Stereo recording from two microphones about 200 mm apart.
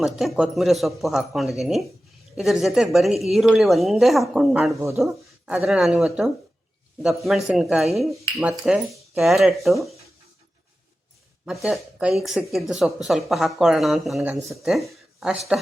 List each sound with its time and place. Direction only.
0.0 s speech: centre (ahead or behind)
4.8 s speech: 15° right (ahead or behind)
11.4 s speech: centre (ahead or behind)